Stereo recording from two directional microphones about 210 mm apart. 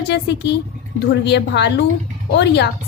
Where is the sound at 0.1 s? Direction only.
55° left (ahead or behind).